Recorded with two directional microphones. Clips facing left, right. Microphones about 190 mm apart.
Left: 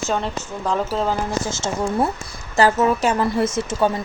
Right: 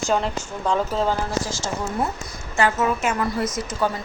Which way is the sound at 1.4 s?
25° left (ahead or behind).